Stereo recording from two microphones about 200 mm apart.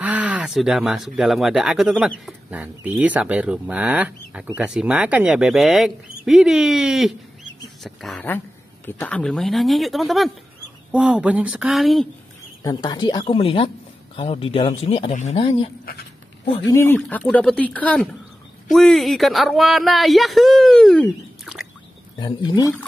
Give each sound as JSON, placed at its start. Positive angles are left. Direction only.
{"t": 0.0, "sound": "speech", "side_deg": -5}
{"t": 12.6, "sound": "speech", "side_deg": 20}
{"t": 16.5, "sound": "speech", "side_deg": 15}
{"t": 22.2, "sound": "speech", "side_deg": 20}